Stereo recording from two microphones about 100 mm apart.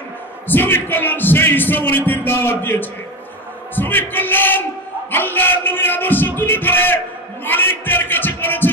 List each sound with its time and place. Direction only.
0.5 s speech: 20° left (ahead or behind)
7.4 s heart sounds: 20° left (ahead or behind)